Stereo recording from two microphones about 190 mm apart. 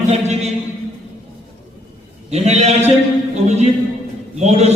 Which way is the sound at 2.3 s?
35° right (ahead or behind).